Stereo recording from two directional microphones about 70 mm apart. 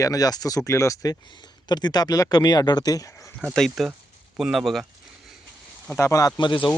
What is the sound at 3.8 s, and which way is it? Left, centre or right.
Speech, centre.